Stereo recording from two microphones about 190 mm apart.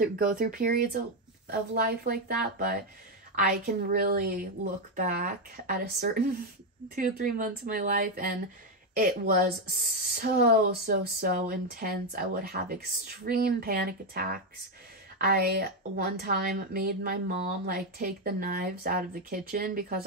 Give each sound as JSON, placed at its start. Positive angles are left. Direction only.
{"t": 0.0, "sound": "a woman's voice", "side_deg": -45}